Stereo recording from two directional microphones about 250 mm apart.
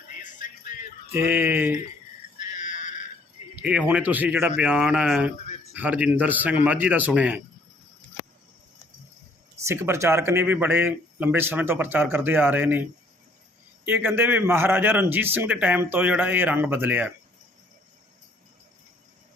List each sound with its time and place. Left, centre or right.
1.1 s speech: centre
2.4 s a sound: left
3.5 s speech: centre
9.6 s speech: centre
13.8 s speech: centre